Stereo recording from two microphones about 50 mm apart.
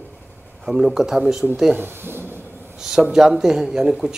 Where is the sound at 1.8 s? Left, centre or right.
Right.